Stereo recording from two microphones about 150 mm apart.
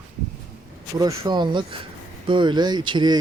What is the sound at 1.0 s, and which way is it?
Speech, 30° right (ahead or behind).